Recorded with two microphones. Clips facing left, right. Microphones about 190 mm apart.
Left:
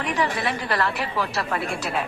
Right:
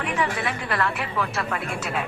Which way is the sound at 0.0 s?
35° left (ahead or behind).